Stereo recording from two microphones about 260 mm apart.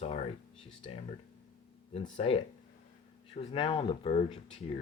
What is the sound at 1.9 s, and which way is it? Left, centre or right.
Speech, left.